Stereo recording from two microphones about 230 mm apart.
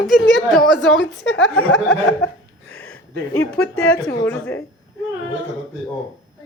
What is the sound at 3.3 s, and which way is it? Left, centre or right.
A woman's voice, centre.